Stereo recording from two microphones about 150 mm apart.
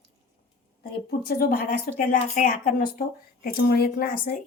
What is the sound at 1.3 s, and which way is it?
A woman's voice, 85° left.